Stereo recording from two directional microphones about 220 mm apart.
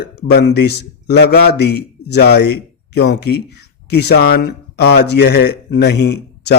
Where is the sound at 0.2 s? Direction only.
45° left (ahead or behind).